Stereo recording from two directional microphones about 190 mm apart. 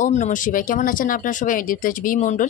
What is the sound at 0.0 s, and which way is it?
A woman's voice, 40° left (ahead or behind).